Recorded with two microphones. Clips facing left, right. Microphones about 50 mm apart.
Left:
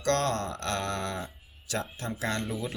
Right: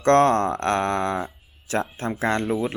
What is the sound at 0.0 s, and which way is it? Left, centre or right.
Speech, right.